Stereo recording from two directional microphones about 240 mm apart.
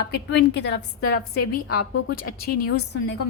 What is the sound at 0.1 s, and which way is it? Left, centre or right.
A woman's voice, left.